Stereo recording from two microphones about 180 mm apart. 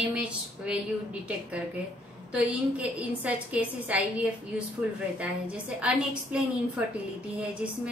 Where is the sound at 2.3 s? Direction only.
5° right (ahead or behind).